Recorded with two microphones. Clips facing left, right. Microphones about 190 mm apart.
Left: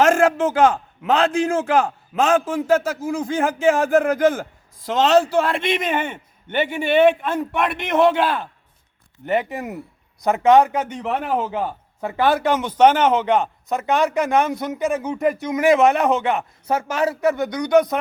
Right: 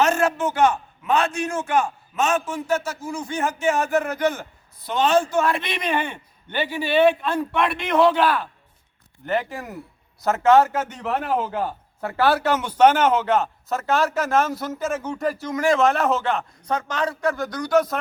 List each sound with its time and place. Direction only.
0.0 s a man's voice: 90° left
4.2 s a man's voice: 50° left (ahead or behind)
4.8 s a man's voice: 90° left
5.2 s a man's voice: 30° left (ahead or behind)
9.2 s speech: centre (ahead or behind)
10.9 s a man's voice: 10° left (ahead or behind)
12.3 s speech: 5° right (ahead or behind)
14.7 s a man's voice: 15° left (ahead or behind)
15.6 s a man's voice: centre (ahead or behind)